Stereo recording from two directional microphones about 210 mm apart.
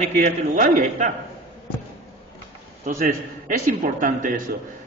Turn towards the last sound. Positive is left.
turn(degrees=-40)  # may be behind; listen again after turning